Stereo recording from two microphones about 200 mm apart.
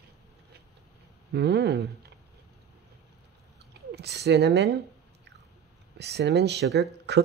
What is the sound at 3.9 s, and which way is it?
Speech, 55° right (ahead or behind).